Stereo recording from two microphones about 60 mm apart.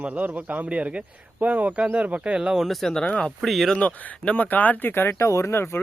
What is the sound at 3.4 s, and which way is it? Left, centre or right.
Speech, centre.